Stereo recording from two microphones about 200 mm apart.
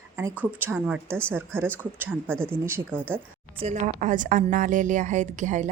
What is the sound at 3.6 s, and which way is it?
A woman's voice, 40° right (ahead or behind).